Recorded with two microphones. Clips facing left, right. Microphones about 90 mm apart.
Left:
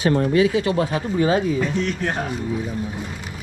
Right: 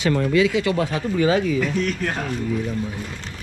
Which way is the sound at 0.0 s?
30° left (ahead or behind).